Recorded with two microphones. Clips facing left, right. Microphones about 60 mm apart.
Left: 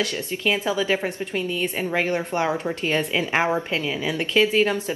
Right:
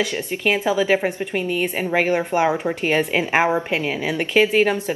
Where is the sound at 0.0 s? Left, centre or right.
Right.